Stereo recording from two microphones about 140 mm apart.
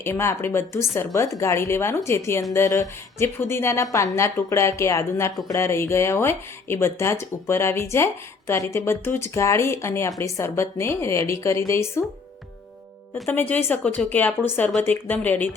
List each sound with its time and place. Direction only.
0.0 s speech: 20° left (ahead or behind)
13.2 s speech: 15° left (ahead or behind)